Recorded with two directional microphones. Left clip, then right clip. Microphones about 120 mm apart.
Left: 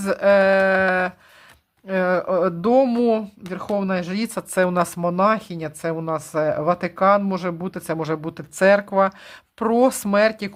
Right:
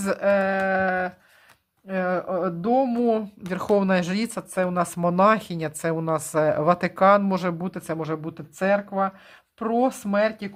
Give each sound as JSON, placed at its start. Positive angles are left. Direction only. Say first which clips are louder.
{"t": 0.0, "sound": "speech", "louder": "left 3 dB", "side_deg": 5}
{"t": 0.3, "sound": "speech", "louder": "left 7 dB", "side_deg": 25}
{"t": 1.9, "sound": "speech", "louder": "left 5 dB", "side_deg": 25}
{"t": 3.4, "sound": "speech", "louder": "right 2 dB", "side_deg": -15}
{"t": 4.3, "sound": "speech", "louder": "left 5 dB", "side_deg": 15}
{"t": 4.9, "sound": "speech", "louder": "right 3 dB", "side_deg": -10}
{"t": 7.6, "sound": "speech", "louder": "left 3 dB", "side_deg": 10}